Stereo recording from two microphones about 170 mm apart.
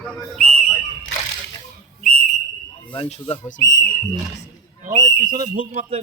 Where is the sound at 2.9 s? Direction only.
35° left (ahead or behind).